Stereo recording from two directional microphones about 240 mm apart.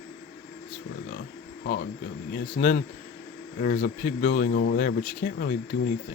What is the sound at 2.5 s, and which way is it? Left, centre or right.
Speech, left.